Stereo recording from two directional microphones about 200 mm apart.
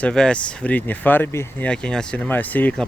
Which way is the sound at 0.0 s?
5° left (ahead or behind).